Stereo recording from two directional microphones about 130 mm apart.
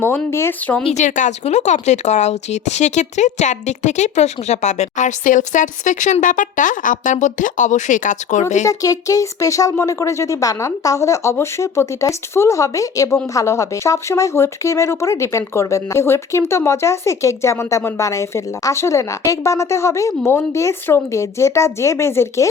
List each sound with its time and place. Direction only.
0.3 s speech: 20° left (ahead or behind)
0.9 s speech: 70° left (ahead or behind)
8.6 s speech: 25° left (ahead or behind)